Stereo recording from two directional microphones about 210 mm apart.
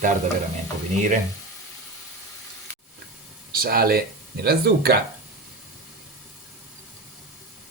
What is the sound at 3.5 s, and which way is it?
Speech, 45° right (ahead or behind).